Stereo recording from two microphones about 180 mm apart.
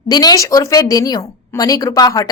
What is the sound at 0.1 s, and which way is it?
A woman's voice, 20° left (ahead or behind).